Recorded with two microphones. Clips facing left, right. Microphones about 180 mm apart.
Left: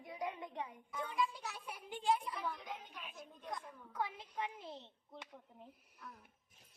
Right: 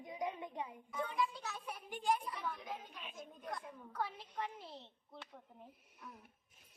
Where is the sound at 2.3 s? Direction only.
Centre (ahead or behind).